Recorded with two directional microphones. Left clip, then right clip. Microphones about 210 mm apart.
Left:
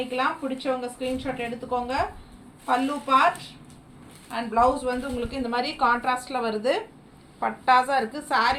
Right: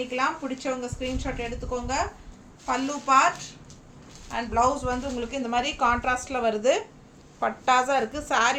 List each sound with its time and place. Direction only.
0.1 s a woman's voice: 15° right (ahead or behind)
4.3 s a woman's voice: 15° right (ahead or behind)